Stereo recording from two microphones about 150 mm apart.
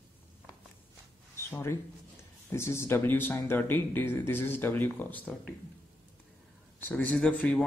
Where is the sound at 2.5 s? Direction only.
15° left (ahead or behind).